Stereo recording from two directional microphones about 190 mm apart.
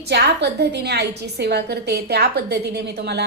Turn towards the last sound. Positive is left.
turn(degrees=-60)  # may be behind; listen again after turning